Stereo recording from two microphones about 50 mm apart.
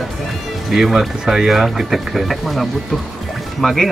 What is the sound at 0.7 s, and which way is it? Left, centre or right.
Speech, centre.